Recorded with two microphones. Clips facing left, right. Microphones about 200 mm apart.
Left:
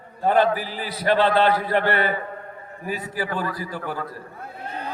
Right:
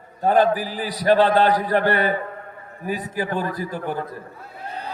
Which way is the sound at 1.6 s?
45° right (ahead or behind).